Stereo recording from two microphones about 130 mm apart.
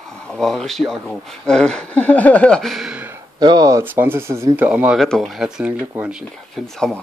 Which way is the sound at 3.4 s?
30° right (ahead or behind).